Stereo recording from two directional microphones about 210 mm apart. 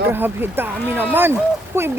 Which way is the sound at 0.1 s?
10° right (ahead or behind).